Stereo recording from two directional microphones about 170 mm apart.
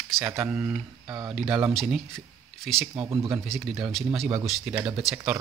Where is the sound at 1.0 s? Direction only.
25° right (ahead or behind).